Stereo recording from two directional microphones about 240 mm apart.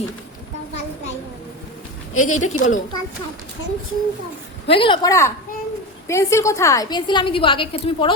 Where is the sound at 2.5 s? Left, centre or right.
Left.